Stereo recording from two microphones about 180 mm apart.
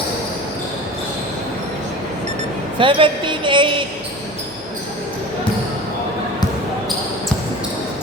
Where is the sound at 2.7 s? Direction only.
30° right (ahead or behind).